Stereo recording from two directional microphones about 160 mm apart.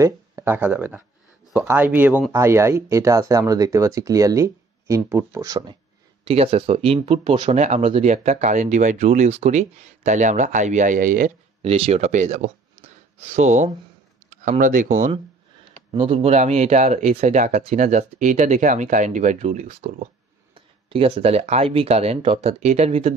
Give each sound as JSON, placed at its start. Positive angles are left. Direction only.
{"t": 0.0, "sound": "speech", "side_deg": -15}
{"t": 6.2, "sound": "speech", "side_deg": -40}
{"t": 11.6, "sound": "speech", "side_deg": -40}
{"t": 15.9, "sound": "speech", "side_deg": -35}
{"t": 20.5, "sound": "speech", "side_deg": -35}